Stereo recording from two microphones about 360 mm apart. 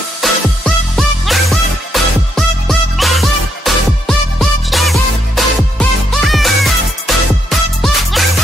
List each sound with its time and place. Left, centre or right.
0.2 s music: centre